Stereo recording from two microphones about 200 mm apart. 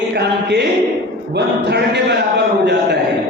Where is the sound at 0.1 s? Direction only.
55° right (ahead or behind).